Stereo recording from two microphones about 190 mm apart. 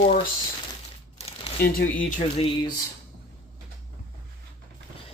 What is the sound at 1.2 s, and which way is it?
Crumpling, 30° left (ahead or behind).